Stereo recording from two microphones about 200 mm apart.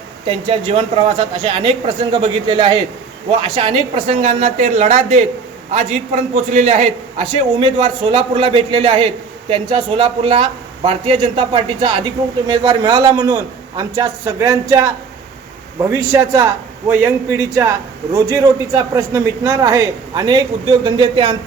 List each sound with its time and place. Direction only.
0.3 s a man's voice: 30° right (ahead or behind)